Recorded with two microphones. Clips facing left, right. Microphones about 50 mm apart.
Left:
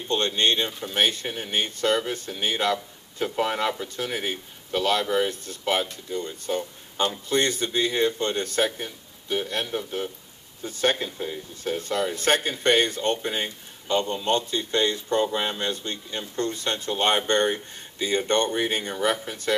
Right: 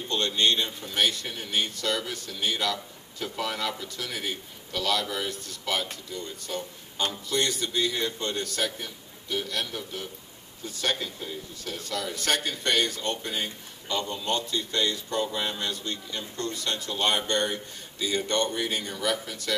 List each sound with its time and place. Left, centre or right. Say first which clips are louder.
0.1 s speech: left 2 dB; left